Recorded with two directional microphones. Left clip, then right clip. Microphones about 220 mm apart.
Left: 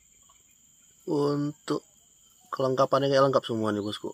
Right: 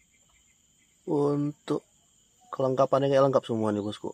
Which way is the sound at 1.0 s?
5° right (ahead or behind).